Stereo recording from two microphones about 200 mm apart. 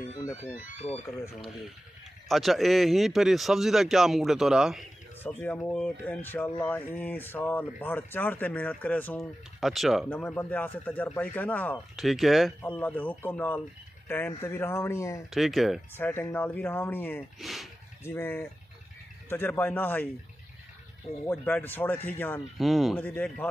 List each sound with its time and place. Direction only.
2.2 s speech: centre (ahead or behind)
5.2 s speech: 10° left (ahead or behind)
15.3 s speech: centre (ahead or behind)
16.0 s speech: 10° left (ahead or behind)
17.4 s speech: centre (ahead or behind)
18.0 s speech: 10° left (ahead or behind)
21.3 s speech: 10° left (ahead or behind)